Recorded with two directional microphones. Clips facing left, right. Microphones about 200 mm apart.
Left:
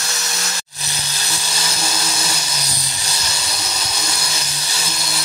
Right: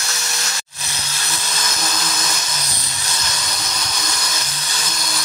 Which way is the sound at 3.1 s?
10° left (ahead or behind).